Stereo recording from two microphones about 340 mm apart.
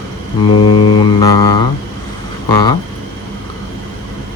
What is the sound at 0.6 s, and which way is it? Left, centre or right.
Speech, centre.